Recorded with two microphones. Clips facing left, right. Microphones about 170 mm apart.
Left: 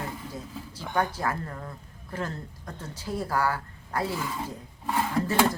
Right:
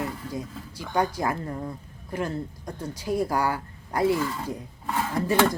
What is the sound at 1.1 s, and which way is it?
Speech, 15° right (ahead or behind).